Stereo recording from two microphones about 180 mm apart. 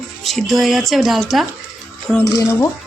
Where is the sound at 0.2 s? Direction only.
Centre (ahead or behind).